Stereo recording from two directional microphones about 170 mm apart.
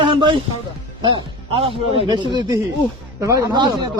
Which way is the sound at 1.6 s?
30° right (ahead or behind).